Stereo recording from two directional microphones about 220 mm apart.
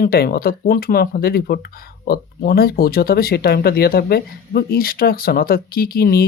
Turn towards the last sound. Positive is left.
turn(degrees=45)  # may be behind; listen again after turning